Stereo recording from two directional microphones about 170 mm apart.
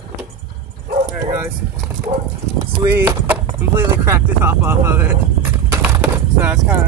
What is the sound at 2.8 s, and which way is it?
Speech, 20° right (ahead or behind).